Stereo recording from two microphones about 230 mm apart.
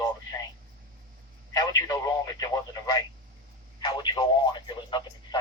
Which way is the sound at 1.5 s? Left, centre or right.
Centre.